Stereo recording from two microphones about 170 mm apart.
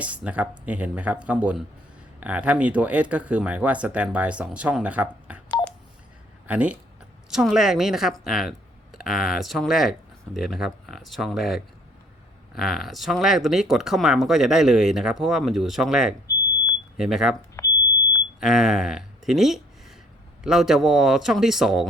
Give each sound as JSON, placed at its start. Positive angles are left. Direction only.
{"t": 0.0, "sound": "speech", "side_deg": -10}
{"t": 6.5, "sound": "speech", "side_deg": -5}
{"t": 17.6, "sound": "smoke detector", "side_deg": 15}
{"t": 18.3, "sound": "speech", "side_deg": -5}